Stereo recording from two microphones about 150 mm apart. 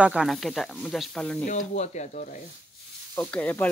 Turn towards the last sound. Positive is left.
turn(degrees=10)  # may be behind; listen again after turning